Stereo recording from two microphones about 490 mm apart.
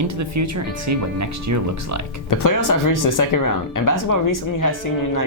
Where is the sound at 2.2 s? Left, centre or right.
Left.